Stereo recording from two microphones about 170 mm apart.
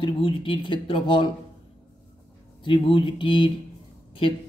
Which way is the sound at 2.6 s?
30° left (ahead or behind).